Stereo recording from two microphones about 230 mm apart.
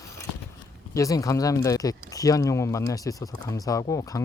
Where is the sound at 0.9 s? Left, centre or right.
Centre.